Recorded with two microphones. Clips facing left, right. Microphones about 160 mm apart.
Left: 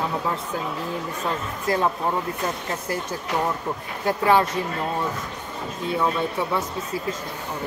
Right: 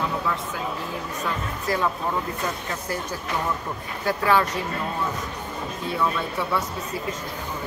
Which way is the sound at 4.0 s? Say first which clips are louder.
Left 2 dB; 25° left (ahead or behind).